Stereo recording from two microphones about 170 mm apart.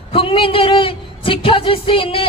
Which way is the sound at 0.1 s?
30° left (ahead or behind).